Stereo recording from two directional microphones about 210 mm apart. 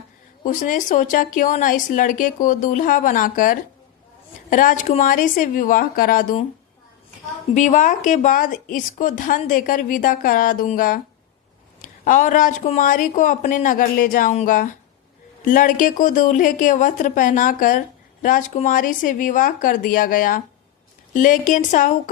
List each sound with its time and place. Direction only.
0.4 s a woman's voice: 40° left (ahead or behind)
7.5 s a woman's voice: 35° left (ahead or behind)